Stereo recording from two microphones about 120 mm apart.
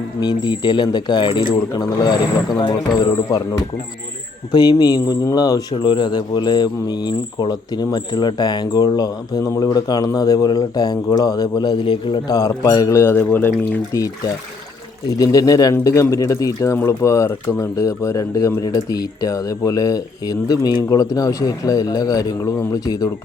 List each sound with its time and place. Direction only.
0.2 s speech: 35° left (ahead or behind)
4.8 s speech: 30° left (ahead or behind); by 13.7 s 15° left (ahead or behind)
15.2 s speech: 35° left (ahead or behind)